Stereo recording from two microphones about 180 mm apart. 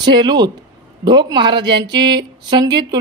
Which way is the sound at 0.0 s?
25° right (ahead or behind).